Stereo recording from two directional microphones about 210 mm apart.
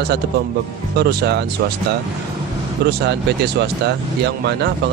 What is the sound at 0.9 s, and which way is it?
Speech, 50° right (ahead or behind).